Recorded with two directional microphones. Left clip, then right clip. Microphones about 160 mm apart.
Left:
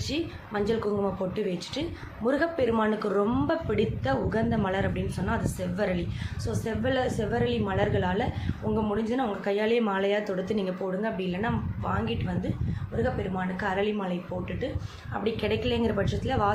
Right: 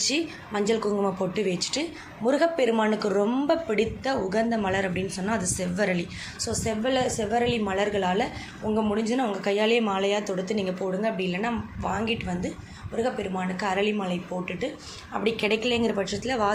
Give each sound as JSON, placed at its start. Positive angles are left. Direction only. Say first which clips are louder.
{"t": 0.0, "sound": "a woman's voice", "louder": "right 5 dB", "side_deg": 5}
{"t": 9.8, "sound": "a woman's voice", "louder": "right 1 dB", "side_deg": 20}